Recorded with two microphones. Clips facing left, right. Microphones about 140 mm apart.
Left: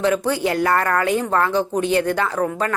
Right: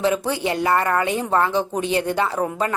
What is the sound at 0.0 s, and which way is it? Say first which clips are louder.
Speech: left 2 dB; centre (ahead or behind).